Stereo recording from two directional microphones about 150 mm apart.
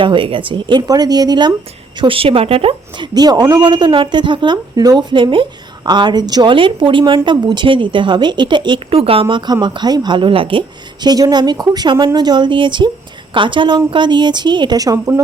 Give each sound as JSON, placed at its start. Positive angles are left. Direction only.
{"t": 0.0, "sound": "speech", "side_deg": -35}
{"t": 9.3, "sound": "speech", "side_deg": -30}